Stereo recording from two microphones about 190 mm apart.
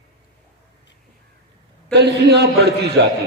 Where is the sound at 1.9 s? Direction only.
60° right (ahead or behind).